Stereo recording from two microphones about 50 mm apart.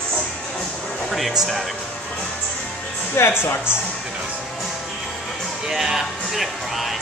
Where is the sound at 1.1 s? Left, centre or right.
Centre.